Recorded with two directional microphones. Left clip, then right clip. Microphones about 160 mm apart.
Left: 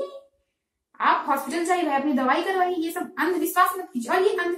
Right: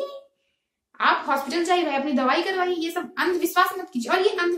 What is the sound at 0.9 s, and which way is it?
A child's voice, 35° right (ahead or behind).